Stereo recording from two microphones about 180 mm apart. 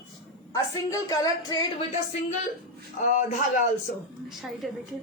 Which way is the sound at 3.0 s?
45° left (ahead or behind).